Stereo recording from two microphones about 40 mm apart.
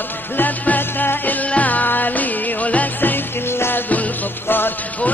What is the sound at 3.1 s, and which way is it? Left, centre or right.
Music, left.